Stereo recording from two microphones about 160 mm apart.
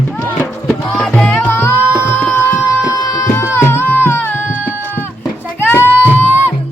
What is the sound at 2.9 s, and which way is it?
Tabla, 20° left (ahead or behind).